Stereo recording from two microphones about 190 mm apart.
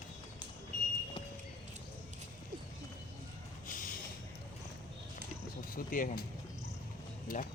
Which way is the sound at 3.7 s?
45° left (ahead or behind).